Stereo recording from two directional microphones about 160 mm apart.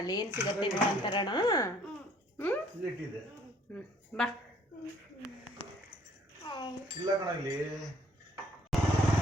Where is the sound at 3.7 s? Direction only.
5° left (ahead or behind).